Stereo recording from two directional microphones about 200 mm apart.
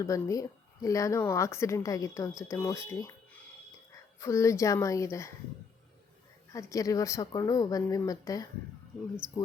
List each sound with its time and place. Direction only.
0.0 s speech: 15° left (ahead or behind)
4.2 s speech: 15° left (ahead or behind)
6.5 s speech: 15° left (ahead or behind)